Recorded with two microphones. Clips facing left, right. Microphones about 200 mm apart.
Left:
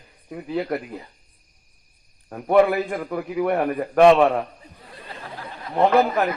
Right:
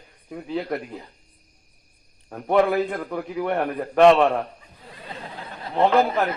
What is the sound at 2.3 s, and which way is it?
A man's voice, centre (ahead or behind).